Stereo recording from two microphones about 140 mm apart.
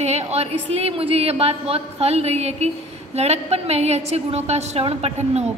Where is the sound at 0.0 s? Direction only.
50° right (ahead or behind).